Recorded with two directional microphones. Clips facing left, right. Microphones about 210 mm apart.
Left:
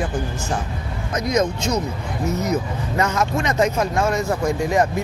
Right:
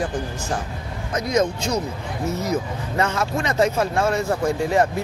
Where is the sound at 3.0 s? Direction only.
30° right (ahead or behind).